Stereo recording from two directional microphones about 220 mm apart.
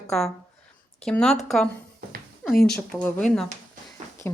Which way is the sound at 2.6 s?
45° left (ahead or behind).